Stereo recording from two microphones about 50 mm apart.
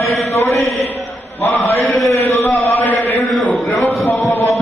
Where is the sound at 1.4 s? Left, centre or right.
Left.